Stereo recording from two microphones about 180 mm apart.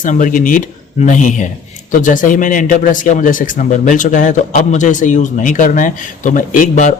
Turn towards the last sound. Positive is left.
turn(degrees=45)  # may be behind; listen again after turning